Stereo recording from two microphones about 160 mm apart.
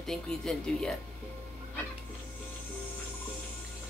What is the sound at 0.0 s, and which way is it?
Speech, 5° left (ahead or behind).